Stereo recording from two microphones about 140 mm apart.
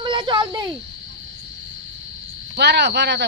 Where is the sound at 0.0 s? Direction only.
35° right (ahead or behind).